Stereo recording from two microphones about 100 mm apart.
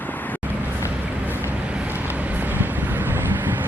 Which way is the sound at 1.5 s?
15° right (ahead or behind).